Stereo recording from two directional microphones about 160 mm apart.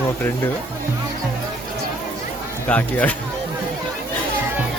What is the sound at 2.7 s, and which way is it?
Speech, 10° left (ahead or behind).